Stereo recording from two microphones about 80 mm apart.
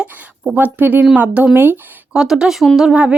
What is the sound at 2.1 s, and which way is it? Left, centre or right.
Speech, centre.